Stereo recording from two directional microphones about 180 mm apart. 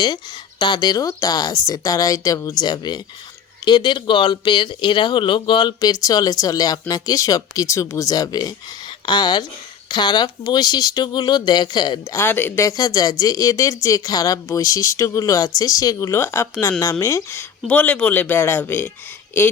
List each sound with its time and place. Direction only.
0.6 s speech: 25° left (ahead or behind)